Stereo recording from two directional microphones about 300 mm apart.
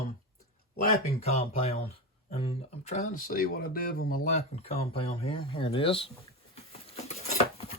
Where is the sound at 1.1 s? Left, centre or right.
Left.